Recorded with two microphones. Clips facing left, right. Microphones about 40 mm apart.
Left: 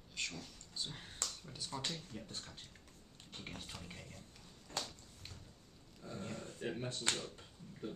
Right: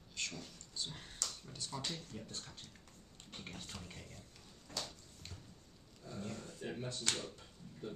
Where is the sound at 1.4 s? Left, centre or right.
Centre.